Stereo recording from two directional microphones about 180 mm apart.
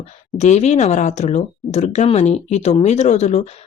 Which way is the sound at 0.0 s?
40° left (ahead or behind).